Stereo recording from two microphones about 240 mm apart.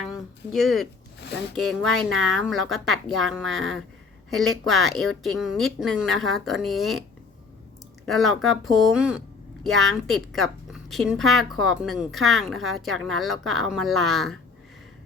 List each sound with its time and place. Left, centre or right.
0.1 s a sound: centre
1.5 s speech: centre
2.0 s speech: right
2.5 s speech: centre
4.3 s speech: centre
8.1 s a woman's voice: centre